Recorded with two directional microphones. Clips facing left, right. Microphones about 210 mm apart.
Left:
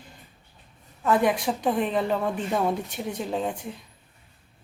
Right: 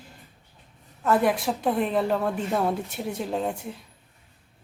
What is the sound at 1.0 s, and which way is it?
A woman's voice, 5° right (ahead or behind).